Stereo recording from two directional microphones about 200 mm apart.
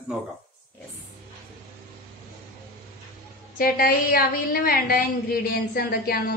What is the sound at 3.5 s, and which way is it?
A woman's voice, 45° left (ahead or behind).